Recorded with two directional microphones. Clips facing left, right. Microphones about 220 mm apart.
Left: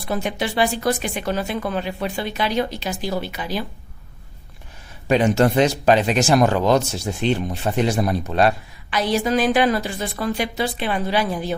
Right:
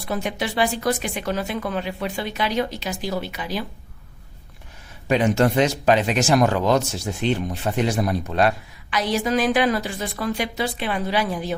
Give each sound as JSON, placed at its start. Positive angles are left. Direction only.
{"t": 0.1, "sound": "speech", "side_deg": 30}
{"t": 5.0, "sound": "speech", "side_deg": 35}